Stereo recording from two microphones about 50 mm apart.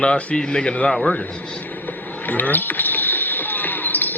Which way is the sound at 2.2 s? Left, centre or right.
Left.